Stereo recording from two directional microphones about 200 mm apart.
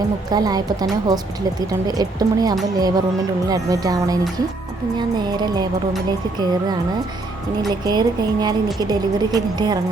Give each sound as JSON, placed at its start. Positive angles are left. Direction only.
{"t": 0.3, "sound": "speech", "side_deg": -20}
{"t": 1.9, "sound": "speech", "side_deg": -20}